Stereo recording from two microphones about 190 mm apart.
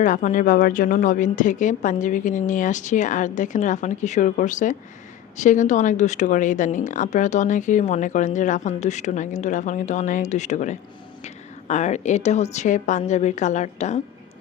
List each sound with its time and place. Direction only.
0.0 s a woman's voice: 40° left (ahead or behind)